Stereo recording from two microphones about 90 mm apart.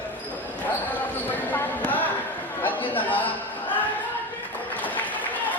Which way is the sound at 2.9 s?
20° left (ahead or behind).